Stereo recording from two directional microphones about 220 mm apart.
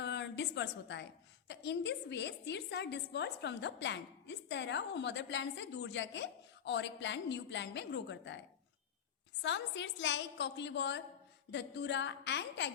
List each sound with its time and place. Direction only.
0.0 s a sound: 50° left (ahead or behind)
1.5 s a woman's voice: 50° left (ahead or behind)
9.4 s a woman's voice: 55° left (ahead or behind)